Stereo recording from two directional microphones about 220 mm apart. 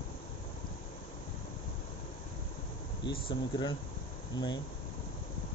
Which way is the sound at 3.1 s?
20° left (ahead or behind).